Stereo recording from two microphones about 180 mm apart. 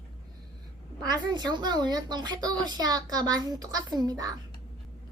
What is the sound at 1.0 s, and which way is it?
A woman's voice, 25° right (ahead or behind).